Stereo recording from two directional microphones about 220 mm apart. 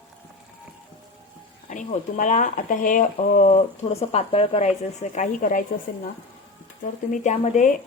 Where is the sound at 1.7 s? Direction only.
35° left (ahead or behind).